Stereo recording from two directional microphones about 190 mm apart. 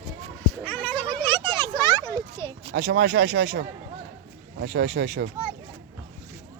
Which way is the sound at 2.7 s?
60° right (ahead or behind).